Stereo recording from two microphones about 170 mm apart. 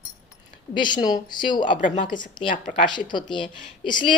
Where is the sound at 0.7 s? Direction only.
25° left (ahead or behind).